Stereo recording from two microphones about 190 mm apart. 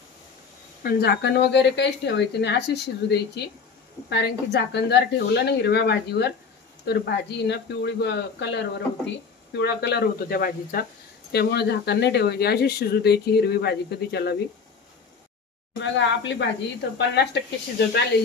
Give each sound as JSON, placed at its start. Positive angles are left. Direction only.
{"t": 0.8, "sound": "speech", "side_deg": 60}
{"t": 9.5, "sound": "speech", "side_deg": 65}
{"t": 15.8, "sound": "speech", "side_deg": 70}